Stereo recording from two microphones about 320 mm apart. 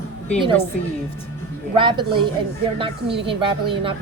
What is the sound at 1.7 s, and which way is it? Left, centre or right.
A woman's voice, centre.